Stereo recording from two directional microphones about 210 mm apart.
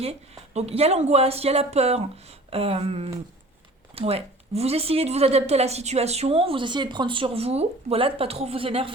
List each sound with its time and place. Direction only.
0.0 s a woman's voice: 30° right (ahead or behind)